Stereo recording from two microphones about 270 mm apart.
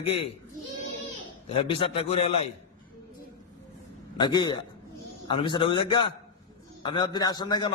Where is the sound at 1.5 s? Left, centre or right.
Left.